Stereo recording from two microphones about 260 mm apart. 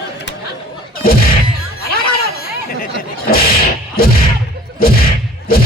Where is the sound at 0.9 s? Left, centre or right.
Left.